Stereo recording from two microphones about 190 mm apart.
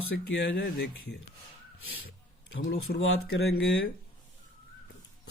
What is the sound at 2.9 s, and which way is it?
Speech, 55° left (ahead or behind).